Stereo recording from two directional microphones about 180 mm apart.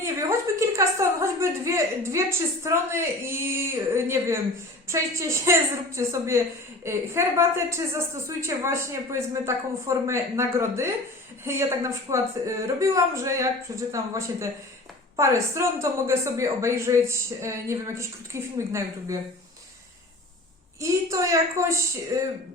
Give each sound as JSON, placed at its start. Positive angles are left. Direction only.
{"t": 0.0, "sound": "a sound", "side_deg": -15}
{"t": 2.6, "sound": "a woman's voice", "side_deg": -15}
{"t": 20.8, "sound": "a woman's voice", "side_deg": -15}